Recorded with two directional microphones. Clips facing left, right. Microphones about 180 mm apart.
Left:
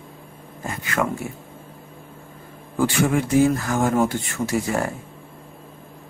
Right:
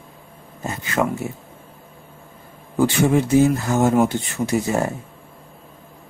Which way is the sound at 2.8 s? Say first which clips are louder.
Right 3 dB; 25° right (ahead or behind).